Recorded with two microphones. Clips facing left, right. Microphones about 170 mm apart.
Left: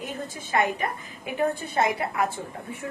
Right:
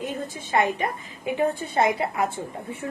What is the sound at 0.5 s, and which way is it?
A woman's voice, 30° right (ahead or behind).